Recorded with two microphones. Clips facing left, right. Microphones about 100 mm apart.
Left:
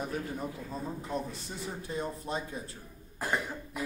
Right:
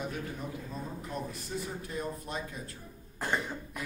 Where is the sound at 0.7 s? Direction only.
30° left (ahead or behind).